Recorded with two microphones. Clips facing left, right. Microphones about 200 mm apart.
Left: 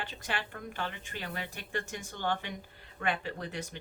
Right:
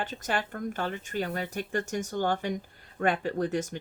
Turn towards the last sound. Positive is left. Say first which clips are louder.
# right 10 dB
turn(degrees=-45)  # may be behind; listen again after turning